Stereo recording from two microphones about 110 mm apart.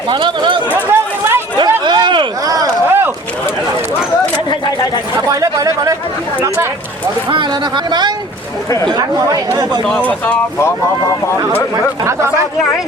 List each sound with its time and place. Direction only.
0.1 s speech: 50° right (ahead or behind)
0.7 s chatter: 20° right (ahead or behind)
1.8 s a sound: 45° right (ahead or behind)
2.8 s a sound: 20° right (ahead or behind)
5.3 s speech: 30° right (ahead or behind)
7.9 s speech: 40° right (ahead or behind)
9.8 s speech: 15° left (ahead or behind)
12.0 s speech: 25° right (ahead or behind)